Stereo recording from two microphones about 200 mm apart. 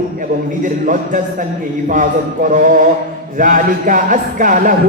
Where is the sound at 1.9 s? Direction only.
40° right (ahead or behind).